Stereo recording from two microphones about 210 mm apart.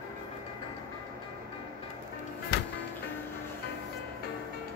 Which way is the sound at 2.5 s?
50° left (ahead or behind).